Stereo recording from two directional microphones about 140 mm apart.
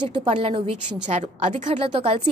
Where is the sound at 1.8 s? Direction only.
40° right (ahead or behind).